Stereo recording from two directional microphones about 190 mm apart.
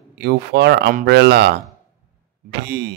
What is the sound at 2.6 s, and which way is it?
Speech, 60° right (ahead or behind).